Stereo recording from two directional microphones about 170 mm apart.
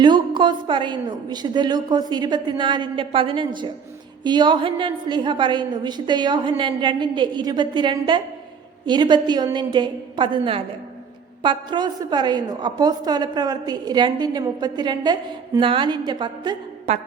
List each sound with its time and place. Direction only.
0.0 s a woman's voice: 25° right (ahead or behind)
16.9 s a woman's voice: 40° right (ahead or behind)